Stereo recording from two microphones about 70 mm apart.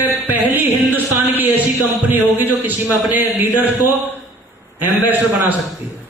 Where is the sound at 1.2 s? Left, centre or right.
Right.